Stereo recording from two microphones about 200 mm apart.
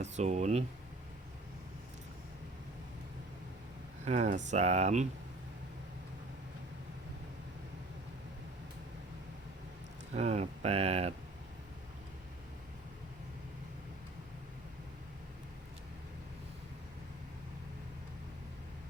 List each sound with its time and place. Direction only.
0.0 s speech: 35° right (ahead or behind)
4.0 s speech: 35° right (ahead or behind)
10.2 s speech: 30° right (ahead or behind)